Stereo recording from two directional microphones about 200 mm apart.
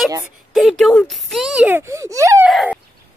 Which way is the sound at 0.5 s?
Centre (ahead or behind).